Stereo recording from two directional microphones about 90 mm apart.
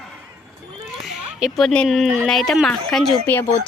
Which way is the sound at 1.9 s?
5° right (ahead or behind).